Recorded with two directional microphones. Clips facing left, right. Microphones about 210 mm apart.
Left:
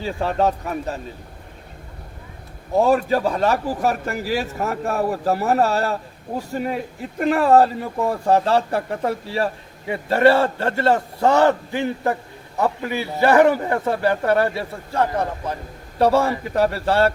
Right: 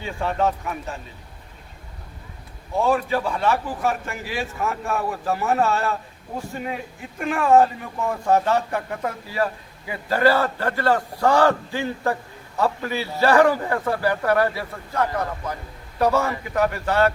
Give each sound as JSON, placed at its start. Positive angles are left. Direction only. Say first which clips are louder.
{"t": 0.0, "sound": "a man's voice", "louder": "left 3 dB", "side_deg": 35}
{"t": 2.7, "sound": "a man's voice", "louder": "left 4 dB", "side_deg": 40}
{"t": 7.2, "sound": "a man's voice", "louder": "left 2 dB", "side_deg": 35}